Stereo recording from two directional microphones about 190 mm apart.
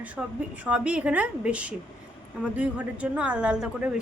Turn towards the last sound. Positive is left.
turn(degrees=-5)  # may be behind; listen again after turning